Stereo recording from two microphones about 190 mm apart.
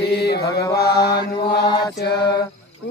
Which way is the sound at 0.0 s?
60° left (ahead or behind).